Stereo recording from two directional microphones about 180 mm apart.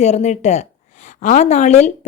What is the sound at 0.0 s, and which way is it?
A woman's voice, 40° left (ahead or behind).